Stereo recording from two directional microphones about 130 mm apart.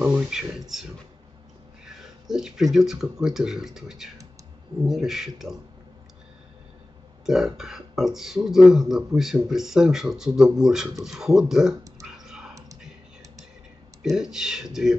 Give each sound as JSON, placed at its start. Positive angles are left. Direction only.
{"t": 0.0, "sound": "speech", "side_deg": -10}
{"t": 2.2, "sound": "speech", "side_deg": -5}
{"t": 7.2, "sound": "speech", "side_deg": -5}
{"t": 12.3, "sound": "a sound", "side_deg": -5}
{"t": 14.0, "sound": "speech", "side_deg": -5}